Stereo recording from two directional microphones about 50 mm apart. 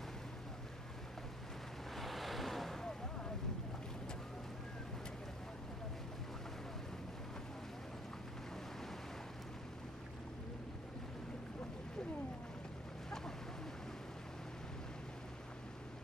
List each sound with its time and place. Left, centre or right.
2.0 s vehicle: centre